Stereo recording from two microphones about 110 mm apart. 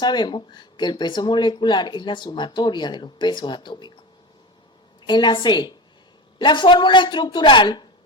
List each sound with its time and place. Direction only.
0.0 s speech: 40° left (ahead or behind)
5.0 s speech: 45° left (ahead or behind)